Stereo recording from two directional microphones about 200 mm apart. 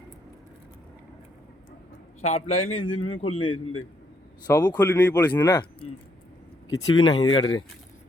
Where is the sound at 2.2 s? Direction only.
35° left (ahead or behind).